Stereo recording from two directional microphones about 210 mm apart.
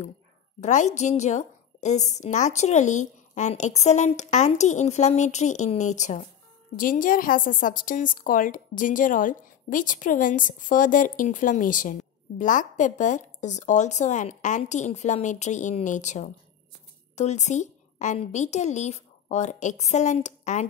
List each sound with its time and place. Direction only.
0.6 s a woman's voice: 35° left (ahead or behind)